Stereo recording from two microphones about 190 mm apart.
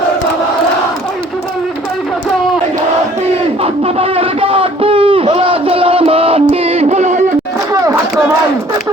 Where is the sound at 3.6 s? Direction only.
30° right (ahead or behind).